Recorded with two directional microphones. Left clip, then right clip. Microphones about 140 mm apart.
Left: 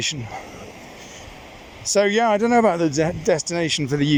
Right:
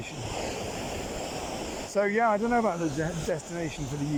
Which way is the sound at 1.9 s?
25° left (ahead or behind).